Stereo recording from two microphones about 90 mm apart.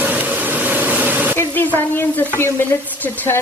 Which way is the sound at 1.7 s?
20° left (ahead or behind).